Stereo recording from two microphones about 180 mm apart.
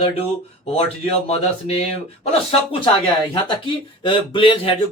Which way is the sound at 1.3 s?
35° left (ahead or behind).